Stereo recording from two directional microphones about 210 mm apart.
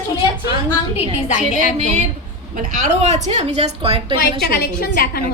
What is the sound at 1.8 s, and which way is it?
A woman's voice, 35° right (ahead or behind).